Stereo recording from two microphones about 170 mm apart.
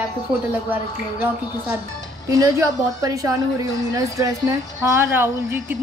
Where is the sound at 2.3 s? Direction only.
20° right (ahead or behind).